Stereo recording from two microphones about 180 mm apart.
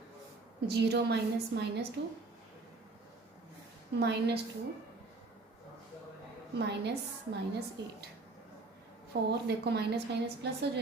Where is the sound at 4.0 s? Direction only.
65° right (ahead or behind).